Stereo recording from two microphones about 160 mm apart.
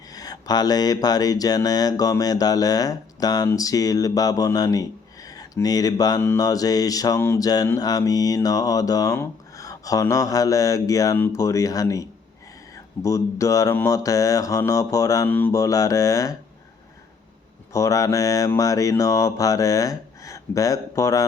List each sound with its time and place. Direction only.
0.1 s speech: 25° left (ahead or behind)
17.7 s speech: 20° left (ahead or behind)